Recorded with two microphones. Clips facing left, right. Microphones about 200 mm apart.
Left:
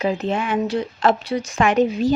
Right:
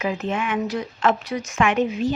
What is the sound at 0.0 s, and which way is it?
A woman's voice, 35° left (ahead or behind).